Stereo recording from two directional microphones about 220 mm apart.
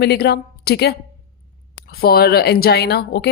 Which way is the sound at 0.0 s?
45° left (ahead or behind).